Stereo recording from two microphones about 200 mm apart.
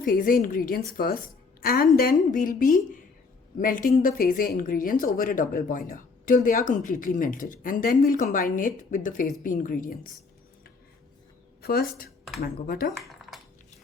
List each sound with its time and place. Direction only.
0.0 s speech: 45° left (ahead or behind)
11.6 s speech: 50° left (ahead or behind)